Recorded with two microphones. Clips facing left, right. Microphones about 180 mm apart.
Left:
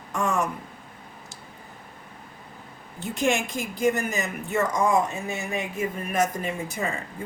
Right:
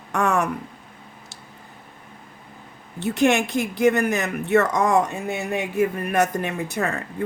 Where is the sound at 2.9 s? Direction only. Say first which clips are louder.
Right 6 dB; 70° right (ahead or behind).